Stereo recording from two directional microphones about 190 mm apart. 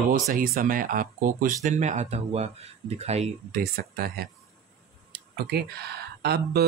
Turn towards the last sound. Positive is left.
turn(degrees=-60)  # may be behind; listen again after turning